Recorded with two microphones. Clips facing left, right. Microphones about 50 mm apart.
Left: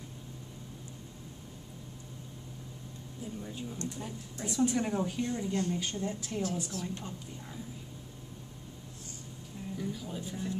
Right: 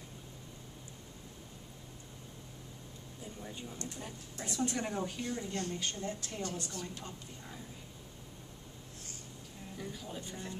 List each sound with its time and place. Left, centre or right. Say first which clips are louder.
3.4 s a woman's voice: left 3 dB; centre
9.8 s speech: left 4 dB; centre